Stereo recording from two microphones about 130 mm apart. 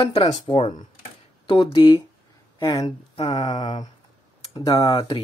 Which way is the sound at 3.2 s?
60° left (ahead or behind).